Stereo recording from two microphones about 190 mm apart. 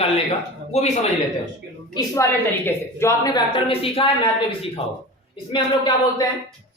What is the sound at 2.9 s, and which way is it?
A man's voice, 15° left (ahead or behind).